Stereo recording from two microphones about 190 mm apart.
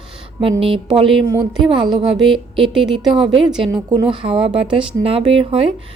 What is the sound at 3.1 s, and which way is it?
Speech, 25° right (ahead or behind).